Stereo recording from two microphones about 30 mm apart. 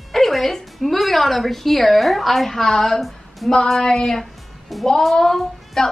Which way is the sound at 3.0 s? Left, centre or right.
Centre.